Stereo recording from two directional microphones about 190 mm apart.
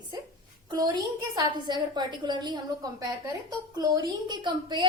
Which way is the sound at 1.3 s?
25° right (ahead or behind).